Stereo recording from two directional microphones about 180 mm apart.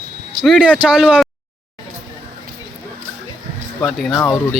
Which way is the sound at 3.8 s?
5° left (ahead or behind).